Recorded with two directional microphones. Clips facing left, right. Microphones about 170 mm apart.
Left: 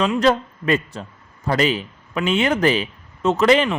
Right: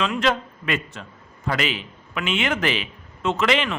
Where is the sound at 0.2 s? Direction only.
40° left (ahead or behind).